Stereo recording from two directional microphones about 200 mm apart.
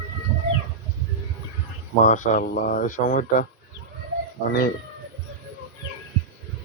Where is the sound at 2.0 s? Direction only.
40° left (ahead or behind).